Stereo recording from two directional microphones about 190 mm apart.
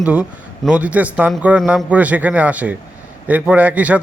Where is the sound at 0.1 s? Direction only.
5° right (ahead or behind).